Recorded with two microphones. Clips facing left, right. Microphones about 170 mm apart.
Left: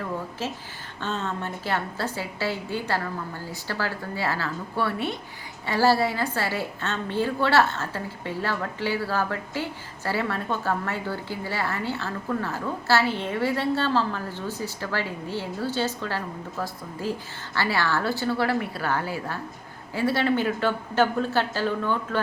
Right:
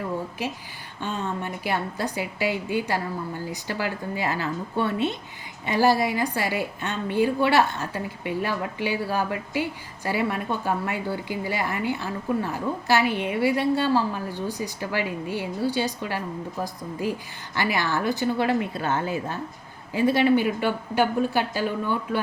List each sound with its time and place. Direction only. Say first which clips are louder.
0.4 s a woman's voice: right 1 dB; 15° right (ahead or behind)